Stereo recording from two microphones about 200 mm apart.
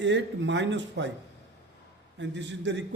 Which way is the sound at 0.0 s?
65° right (ahead or behind).